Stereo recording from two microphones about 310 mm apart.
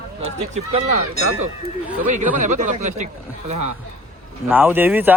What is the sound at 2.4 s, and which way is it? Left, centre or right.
Speech, right.